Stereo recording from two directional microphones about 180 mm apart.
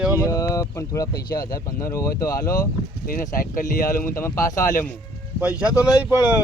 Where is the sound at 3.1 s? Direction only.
55° left (ahead or behind).